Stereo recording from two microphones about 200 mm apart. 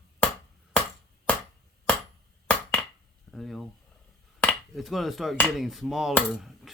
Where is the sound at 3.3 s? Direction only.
Centre (ahead or behind).